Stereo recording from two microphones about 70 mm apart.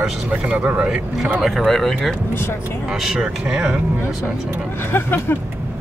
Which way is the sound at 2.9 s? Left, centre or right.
Centre.